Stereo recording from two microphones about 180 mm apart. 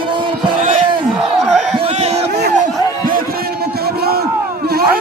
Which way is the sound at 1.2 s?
Centre (ahead or behind).